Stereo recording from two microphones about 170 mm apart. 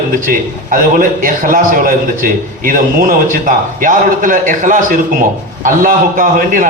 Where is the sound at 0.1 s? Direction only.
55° right (ahead or behind).